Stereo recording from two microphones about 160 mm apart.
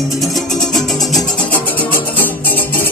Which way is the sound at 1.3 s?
10° left (ahead or behind).